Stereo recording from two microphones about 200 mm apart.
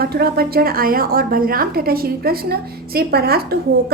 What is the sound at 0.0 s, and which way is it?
A woman's voice, 50° right (ahead or behind).